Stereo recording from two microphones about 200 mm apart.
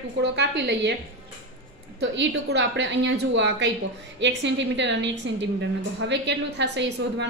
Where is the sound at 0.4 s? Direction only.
60° right (ahead or behind).